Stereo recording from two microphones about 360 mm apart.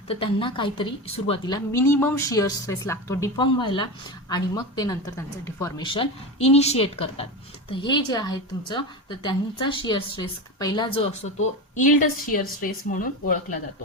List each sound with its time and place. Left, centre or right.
0.1 s a woman's voice: centre